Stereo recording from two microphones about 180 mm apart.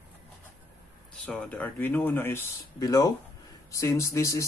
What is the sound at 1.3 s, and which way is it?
Speech, 10° left (ahead or behind).